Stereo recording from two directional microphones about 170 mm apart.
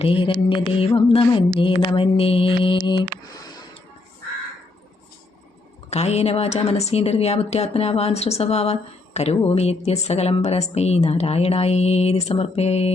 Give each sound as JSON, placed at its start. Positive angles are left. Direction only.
{"t": 0.0, "sound": "speech", "side_deg": 30}
{"t": 5.9, "sound": "speech", "side_deg": 40}